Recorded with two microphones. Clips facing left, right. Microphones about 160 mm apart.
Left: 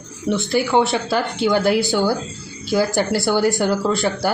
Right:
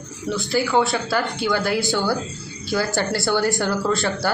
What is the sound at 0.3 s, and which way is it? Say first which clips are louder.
Speech: left 3 dB; 20° left (ahead or behind).